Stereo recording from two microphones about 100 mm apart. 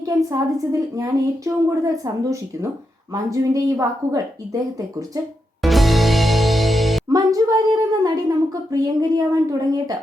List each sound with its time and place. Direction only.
0.0 s a woman's voice: 35° right (ahead or behind)
5.6 s music: centre (ahead or behind)
7.1 s a woman's voice: 40° right (ahead or behind)